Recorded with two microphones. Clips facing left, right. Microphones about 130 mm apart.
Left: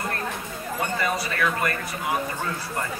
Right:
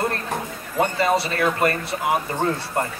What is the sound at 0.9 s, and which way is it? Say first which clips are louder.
A man's voice: right 5 dB; 30° right (ahead or behind).